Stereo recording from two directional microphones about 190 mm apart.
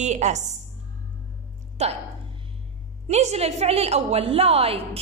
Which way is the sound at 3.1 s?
35° right (ahead or behind).